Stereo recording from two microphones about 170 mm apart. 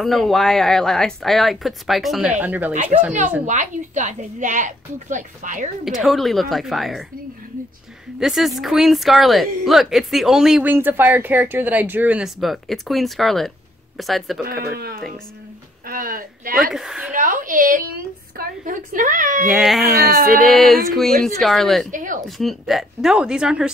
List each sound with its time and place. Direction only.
0.0 s speech: centre (ahead or behind)
2.7 s a woman's voice: 45° right (ahead or behind)
5.9 s speech: centre (ahead or behind)
8.2 s speech: centre (ahead or behind)
14.4 s speech: 65° right (ahead or behind)
16.7 s speech: centre (ahead or behind)
17.1 s a woman's voice: 50° right (ahead or behind)
19.5 s speech: centre (ahead or behind)
20.1 s speech: 60° right (ahead or behind)
20.4 s speech: centre (ahead or behind)
21.9 s a woman's voice: 50° right (ahead or behind)
22.4 s speech: centre (ahead or behind)